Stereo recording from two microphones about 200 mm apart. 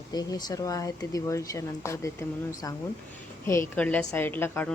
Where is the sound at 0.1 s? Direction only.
20° left (ahead or behind).